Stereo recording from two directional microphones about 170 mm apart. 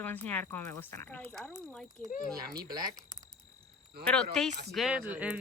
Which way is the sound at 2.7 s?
25° right (ahead or behind).